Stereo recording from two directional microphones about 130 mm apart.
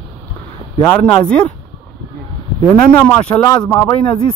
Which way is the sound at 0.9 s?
10° left (ahead or behind).